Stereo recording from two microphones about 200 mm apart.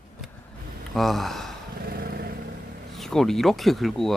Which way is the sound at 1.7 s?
50° right (ahead or behind).